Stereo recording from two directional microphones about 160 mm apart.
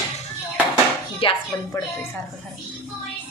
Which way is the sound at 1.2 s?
35° left (ahead or behind).